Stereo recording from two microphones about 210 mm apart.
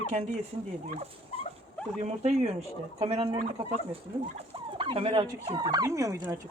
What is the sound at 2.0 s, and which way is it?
Speech, 30° right (ahead or behind).